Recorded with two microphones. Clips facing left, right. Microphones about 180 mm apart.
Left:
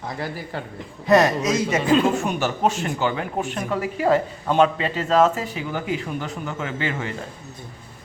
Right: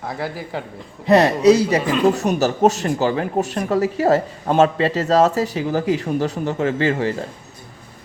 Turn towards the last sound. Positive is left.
turn(degrees=-35)  # may be behind; listen again after turning